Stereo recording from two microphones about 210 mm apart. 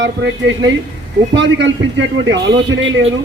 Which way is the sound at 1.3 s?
60° right (ahead or behind).